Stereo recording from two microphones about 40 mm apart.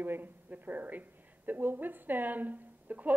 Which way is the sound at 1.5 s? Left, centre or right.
Right.